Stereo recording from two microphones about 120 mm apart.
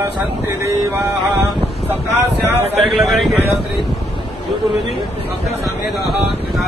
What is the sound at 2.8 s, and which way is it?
Speech, centre (ahead or behind).